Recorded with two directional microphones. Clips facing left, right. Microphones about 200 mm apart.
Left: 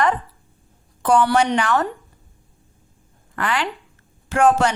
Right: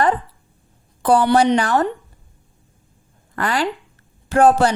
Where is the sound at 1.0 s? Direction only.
35° right (ahead or behind).